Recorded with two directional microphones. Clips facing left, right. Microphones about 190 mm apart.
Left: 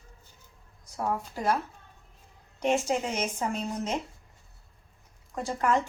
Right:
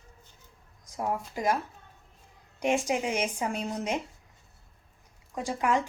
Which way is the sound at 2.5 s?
15° right (ahead or behind).